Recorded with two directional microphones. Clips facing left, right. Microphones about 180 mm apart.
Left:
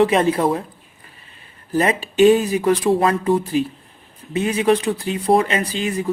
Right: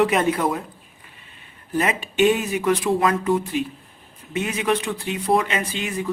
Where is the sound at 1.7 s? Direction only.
35° left (ahead or behind).